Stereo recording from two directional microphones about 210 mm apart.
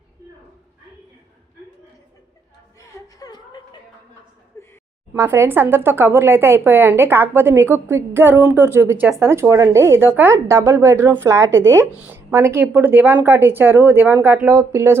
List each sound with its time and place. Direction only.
2.7 s chuckle: 20° left (ahead or behind)
4.5 s a sound: 10° left (ahead or behind)
5.1 s speech: 10° right (ahead or behind)